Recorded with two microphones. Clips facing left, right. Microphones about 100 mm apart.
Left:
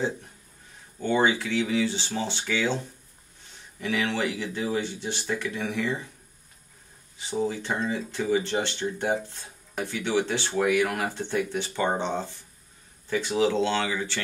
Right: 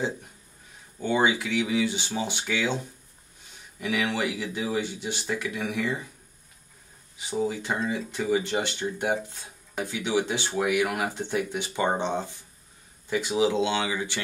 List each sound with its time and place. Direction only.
0.9 s speech: 10° right (ahead or behind)
7.2 s speech: 15° right (ahead or behind)